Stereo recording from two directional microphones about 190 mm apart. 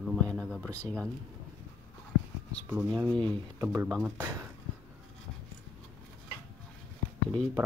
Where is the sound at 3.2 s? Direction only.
25° right (ahead or behind).